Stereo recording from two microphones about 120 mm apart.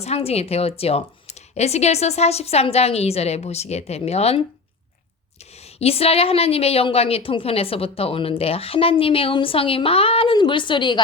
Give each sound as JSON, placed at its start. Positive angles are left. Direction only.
{"t": 0.0, "sound": "speech", "side_deg": 60}
{"t": 5.4, "sound": "speech", "side_deg": 60}